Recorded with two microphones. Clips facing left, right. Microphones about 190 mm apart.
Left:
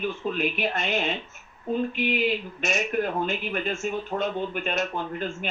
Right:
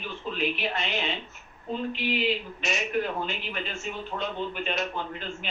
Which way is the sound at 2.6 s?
50° left (ahead or behind).